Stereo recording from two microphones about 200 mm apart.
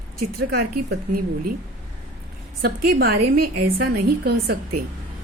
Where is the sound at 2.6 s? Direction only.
50° right (ahead or behind).